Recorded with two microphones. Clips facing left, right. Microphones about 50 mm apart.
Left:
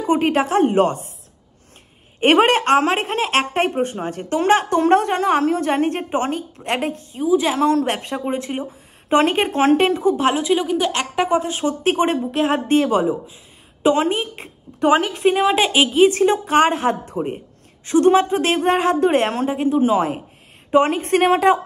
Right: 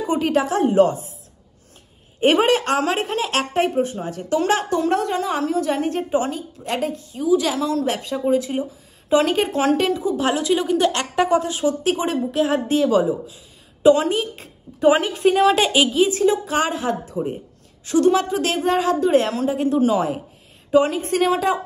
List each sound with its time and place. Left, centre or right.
0.0 s a woman's voice: left
2.1 s a woman's voice: left
7.2 s a woman's voice: left
7.5 s a woman's voice: left
10.4 s a woman's voice: centre
10.9 s speech: left
11.5 s a woman's voice: left
15.2 s a woman's voice: centre
15.8 s a woman's voice: left
16.1 s a woman's voice: left
19.6 s a woman's voice: left